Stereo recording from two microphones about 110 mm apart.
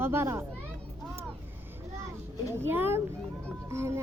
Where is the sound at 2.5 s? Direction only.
20° right (ahead or behind).